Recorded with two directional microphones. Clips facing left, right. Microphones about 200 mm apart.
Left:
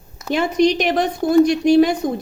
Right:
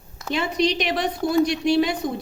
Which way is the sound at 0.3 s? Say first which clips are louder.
Left 6 dB; 50° left (ahead or behind).